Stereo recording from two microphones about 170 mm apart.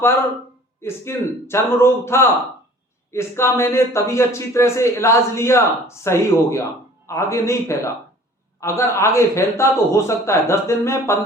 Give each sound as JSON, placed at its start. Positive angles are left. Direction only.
{"t": 0.0, "sound": "a man's voice", "side_deg": 15}